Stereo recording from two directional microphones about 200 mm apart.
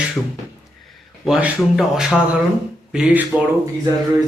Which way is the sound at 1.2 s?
Centre (ahead or behind).